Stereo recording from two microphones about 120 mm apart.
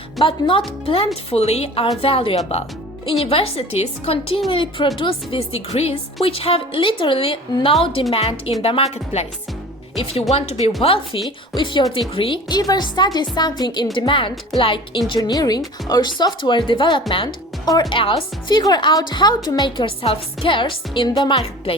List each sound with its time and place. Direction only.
0.2 s a woman's voice: 45° left (ahead or behind)
4.4 s a woman's voice: 45° left (ahead or behind); by 10.7 s 60° left (ahead or behind)
10.8 s a woman's voice: 50° left (ahead or behind)
12.5 s a woman's voice: 35° left (ahead or behind)